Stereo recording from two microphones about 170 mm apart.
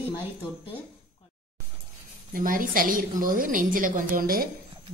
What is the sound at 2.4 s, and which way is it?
A woman's voice, 55° right (ahead or behind).